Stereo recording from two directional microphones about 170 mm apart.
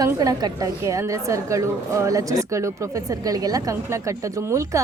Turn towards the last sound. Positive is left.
turn(degrees=-15)  # may be behind; listen again after turning